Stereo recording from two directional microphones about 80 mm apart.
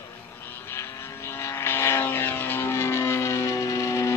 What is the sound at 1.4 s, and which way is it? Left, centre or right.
Vehicle, left.